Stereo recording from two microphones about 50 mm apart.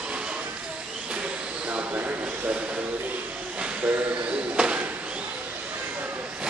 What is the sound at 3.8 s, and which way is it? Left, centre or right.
Bird, right.